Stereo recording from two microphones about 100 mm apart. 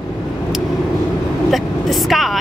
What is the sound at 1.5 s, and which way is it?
Vehicle, centre (ahead or behind).